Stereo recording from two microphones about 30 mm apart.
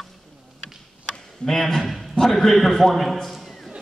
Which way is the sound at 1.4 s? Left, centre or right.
Centre.